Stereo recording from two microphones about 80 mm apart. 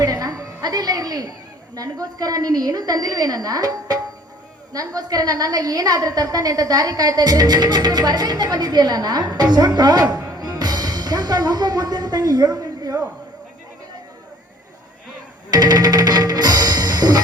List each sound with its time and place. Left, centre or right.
0.0 s music: right
1.7 s a woman's voice: right
10.3 s music: right
15.4 s music: right